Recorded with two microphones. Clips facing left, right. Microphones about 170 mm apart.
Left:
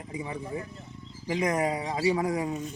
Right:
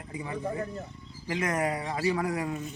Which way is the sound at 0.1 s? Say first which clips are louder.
Right 1 dB; 15° left (ahead or behind).